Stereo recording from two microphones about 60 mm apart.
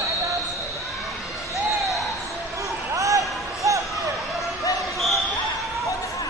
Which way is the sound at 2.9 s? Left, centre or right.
Right.